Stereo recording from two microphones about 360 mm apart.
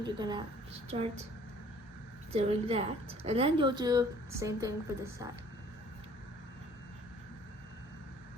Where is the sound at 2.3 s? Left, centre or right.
Centre.